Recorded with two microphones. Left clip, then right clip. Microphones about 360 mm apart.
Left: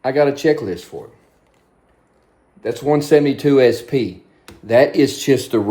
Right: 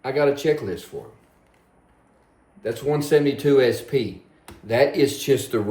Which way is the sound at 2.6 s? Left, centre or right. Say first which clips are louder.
Left 6 dB; centre.